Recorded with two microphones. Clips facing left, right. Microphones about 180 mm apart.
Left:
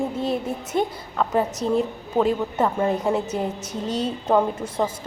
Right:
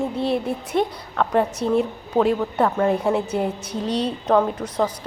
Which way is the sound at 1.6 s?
35° left (ahead or behind).